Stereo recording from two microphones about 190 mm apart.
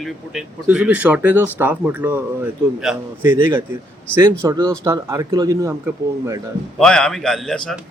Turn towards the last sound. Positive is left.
turn(degrees=5)  # may be behind; listen again after turning